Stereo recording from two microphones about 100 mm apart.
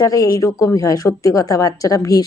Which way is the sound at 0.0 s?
35° left (ahead or behind).